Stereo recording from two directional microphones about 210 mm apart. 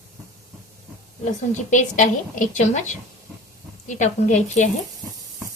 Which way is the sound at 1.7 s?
40° left (ahead or behind).